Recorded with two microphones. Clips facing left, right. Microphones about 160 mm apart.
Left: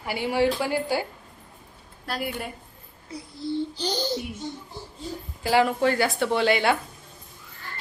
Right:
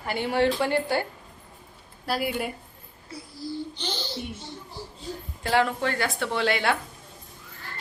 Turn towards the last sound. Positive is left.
turn(degrees=0)  # may be behind; listen again after turning